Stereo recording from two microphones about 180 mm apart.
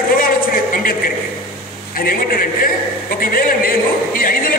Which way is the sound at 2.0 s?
55° left (ahead or behind).